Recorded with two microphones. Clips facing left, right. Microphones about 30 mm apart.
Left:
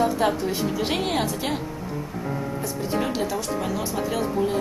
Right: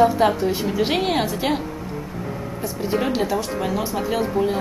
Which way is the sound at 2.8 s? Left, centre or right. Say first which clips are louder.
Right 4 dB; centre.